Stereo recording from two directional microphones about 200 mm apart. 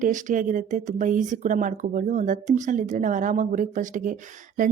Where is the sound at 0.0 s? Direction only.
40° right (ahead or behind).